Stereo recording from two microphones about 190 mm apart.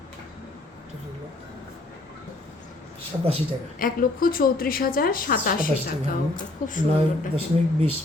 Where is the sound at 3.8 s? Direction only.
45° left (ahead or behind).